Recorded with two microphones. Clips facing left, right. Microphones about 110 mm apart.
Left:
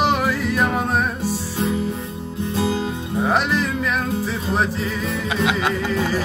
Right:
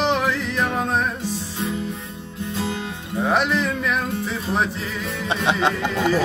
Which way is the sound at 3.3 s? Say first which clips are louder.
Even; centre (ahead or behind).